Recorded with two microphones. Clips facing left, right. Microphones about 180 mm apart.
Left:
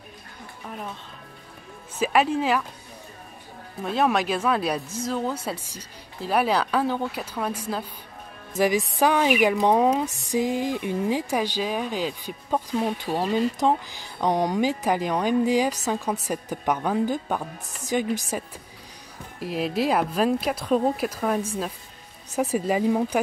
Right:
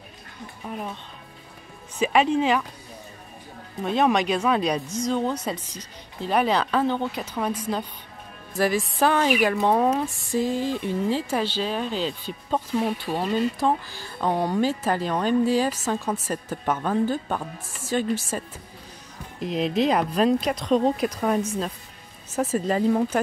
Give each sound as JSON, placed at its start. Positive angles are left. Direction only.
{"t": 0.7, "sound": "speech", "side_deg": -5}
{"t": 2.0, "sound": "speech", "side_deg": 5}
{"t": 3.8, "sound": "speech", "side_deg": 0}
{"t": 12.5, "sound": "speech", "side_deg": -5}
{"t": 12.9, "sound": "speech", "side_deg": 15}
{"t": 19.4, "sound": "speech", "side_deg": 5}
{"t": 22.3, "sound": "speech", "side_deg": 15}